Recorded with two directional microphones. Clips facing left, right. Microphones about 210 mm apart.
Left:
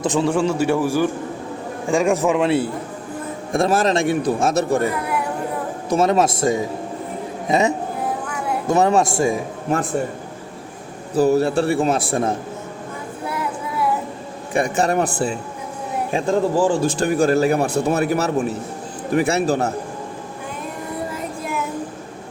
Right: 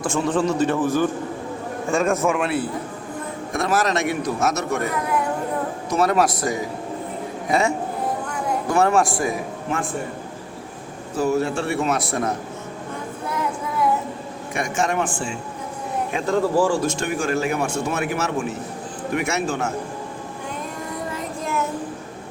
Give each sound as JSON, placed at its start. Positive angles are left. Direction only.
{"t": 0.0, "sound": "a man's voice", "side_deg": 20}
{"t": 0.3, "sound": "a man's voice", "side_deg": 10}
{"t": 5.9, "sound": "a man's voice", "side_deg": 25}
{"t": 11.1, "sound": "a man's voice", "side_deg": 35}
{"t": 13.2, "sound": "a sound", "side_deg": 5}
{"t": 14.5, "sound": "a man's voice", "side_deg": 35}
{"t": 16.6, "sound": "a man's voice", "side_deg": 20}
{"t": 16.8, "sound": "a man's voice", "side_deg": 35}